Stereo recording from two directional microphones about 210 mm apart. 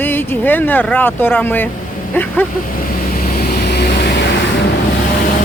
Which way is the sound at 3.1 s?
45° left (ahead or behind).